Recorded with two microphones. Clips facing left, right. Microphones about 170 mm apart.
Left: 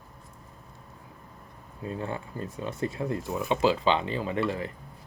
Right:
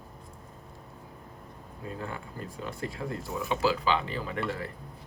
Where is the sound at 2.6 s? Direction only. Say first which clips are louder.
Left 5 dB; 25° left (ahead or behind).